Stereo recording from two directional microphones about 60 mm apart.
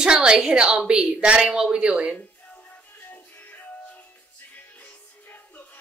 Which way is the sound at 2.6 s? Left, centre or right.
Left.